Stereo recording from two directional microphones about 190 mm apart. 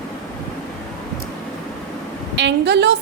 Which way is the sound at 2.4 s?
65° right (ahead or behind).